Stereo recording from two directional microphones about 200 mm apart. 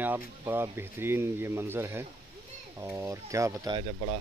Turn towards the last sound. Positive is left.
turn(degrees=-25)  # may be behind; listen again after turning